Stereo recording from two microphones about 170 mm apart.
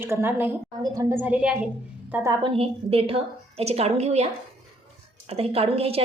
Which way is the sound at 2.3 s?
30° right (ahead or behind).